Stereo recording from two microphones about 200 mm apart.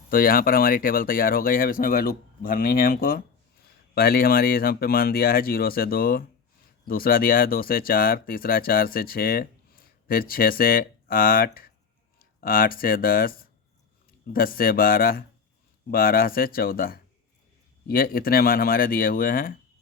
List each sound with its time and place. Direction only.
0.1 s speech: 45° left (ahead or behind)